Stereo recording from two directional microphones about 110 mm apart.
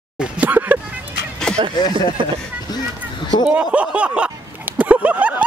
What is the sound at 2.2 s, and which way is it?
Speech, 50° right (ahead or behind).